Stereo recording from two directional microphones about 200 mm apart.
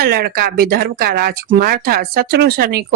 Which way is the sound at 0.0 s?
50° right (ahead or behind).